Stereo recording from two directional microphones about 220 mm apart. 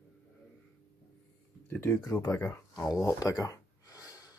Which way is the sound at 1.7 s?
10° left (ahead or behind).